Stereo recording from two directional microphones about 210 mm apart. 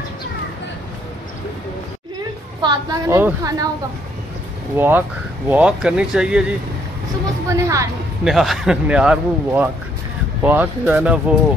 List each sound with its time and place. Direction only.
2.6 s a woman's voice: 20° right (ahead or behind)
4.7 s a woman's voice: 10° right (ahead or behind)
7.4 s a woman's voice: 15° right (ahead or behind)
8.2 s a man's voice: centre (ahead or behind)